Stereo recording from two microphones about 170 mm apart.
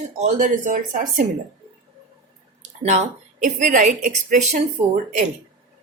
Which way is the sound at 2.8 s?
45° right (ahead or behind).